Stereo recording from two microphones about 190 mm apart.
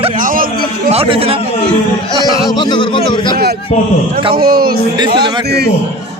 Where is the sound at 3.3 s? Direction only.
55° right (ahead or behind).